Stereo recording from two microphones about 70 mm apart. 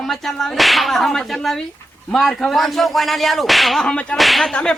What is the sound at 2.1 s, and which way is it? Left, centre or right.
Speech, centre.